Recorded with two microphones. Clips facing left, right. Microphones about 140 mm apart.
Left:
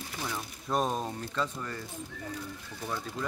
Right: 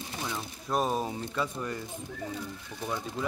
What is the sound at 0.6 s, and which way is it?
Speech, 5° right (ahead or behind).